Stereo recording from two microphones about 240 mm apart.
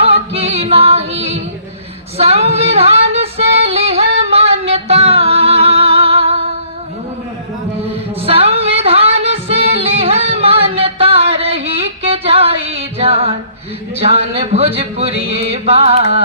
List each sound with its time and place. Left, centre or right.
0.0 s a capella: right
2.1 s female singing: right
8.2 s music: right
14.0 s a sound: right